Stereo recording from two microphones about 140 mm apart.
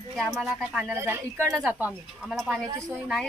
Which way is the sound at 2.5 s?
20° right (ahead or behind).